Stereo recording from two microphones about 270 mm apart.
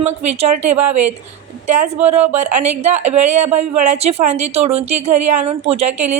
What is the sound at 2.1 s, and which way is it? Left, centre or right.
Speech, right.